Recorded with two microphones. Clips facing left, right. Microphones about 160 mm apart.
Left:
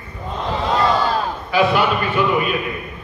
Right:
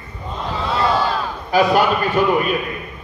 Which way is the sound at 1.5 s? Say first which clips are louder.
Right 2 dB; 40° right (ahead or behind).